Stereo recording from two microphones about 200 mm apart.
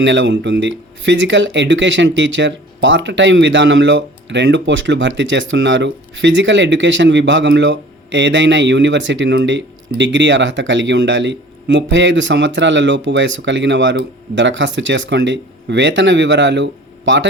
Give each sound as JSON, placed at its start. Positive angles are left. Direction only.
{"t": 0.0, "sound": "speech", "side_deg": -65}